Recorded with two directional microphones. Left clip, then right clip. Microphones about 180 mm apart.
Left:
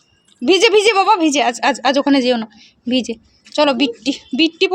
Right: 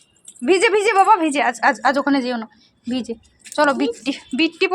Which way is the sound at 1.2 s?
35° left (ahead or behind).